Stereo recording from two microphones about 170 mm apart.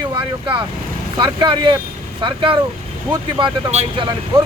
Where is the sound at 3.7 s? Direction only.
40° right (ahead or behind).